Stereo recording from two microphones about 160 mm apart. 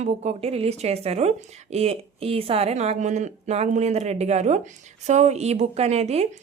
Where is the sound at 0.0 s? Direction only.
40° right (ahead or behind).